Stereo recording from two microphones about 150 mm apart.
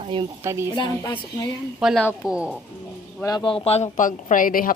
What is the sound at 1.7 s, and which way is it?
Speech, 5° right (ahead or behind).